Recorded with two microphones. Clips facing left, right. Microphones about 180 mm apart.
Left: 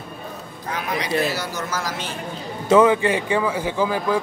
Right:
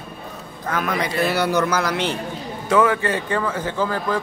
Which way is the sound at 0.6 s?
50° right (ahead or behind).